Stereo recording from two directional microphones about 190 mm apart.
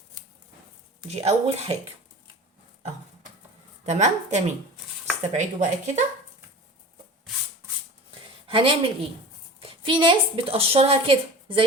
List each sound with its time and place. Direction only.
1.0 s speech: 35° right (ahead or behind)
3.8 s speech: 35° right (ahead or behind)
8.4 s a woman's voice: 30° right (ahead or behind)